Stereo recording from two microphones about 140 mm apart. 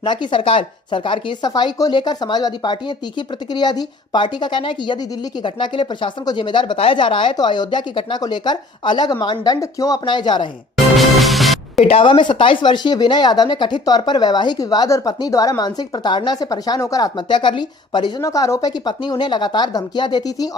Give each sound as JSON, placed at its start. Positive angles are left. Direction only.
{"t": 0.0, "sound": "speech", "side_deg": 35}
{"t": 10.9, "sound": "music", "side_deg": 0}
{"t": 11.9, "sound": "speech", "side_deg": 40}
{"t": 18.3, "sound": "speech", "side_deg": 20}